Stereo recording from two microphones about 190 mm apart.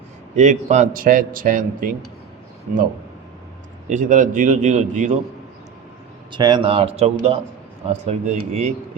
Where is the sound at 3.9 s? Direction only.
40° right (ahead or behind).